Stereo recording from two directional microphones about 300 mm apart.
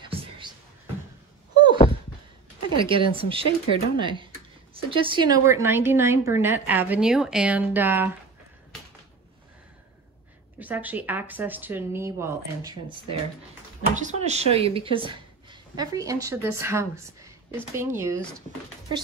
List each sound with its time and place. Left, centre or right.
0.0 s a sound: centre
2.7 s a woman's voice: centre
10.6 s speech: centre
13.9 s a woman's voice: right